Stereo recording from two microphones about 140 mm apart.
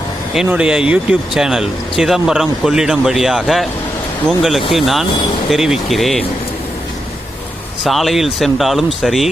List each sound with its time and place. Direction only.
0.3 s speech: 10° right (ahead or behind)
7.9 s speech: centre (ahead or behind)